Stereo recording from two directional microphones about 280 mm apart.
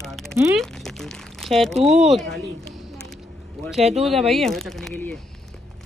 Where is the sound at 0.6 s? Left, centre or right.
Centre.